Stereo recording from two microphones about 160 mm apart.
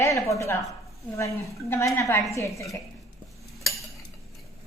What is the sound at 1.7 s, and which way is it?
Speech, 15° left (ahead or behind).